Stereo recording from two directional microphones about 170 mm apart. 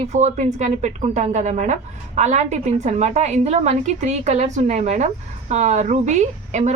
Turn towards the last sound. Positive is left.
turn(degrees=-45)  # may be behind; listen again after turning